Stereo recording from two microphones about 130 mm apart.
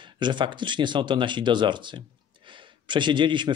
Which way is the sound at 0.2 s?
35° right (ahead or behind).